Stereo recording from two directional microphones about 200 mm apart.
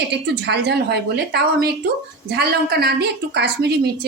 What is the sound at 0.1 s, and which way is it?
A woman's voice, 55° right (ahead or behind).